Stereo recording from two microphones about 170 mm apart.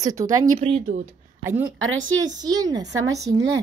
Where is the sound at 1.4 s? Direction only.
15° right (ahead or behind).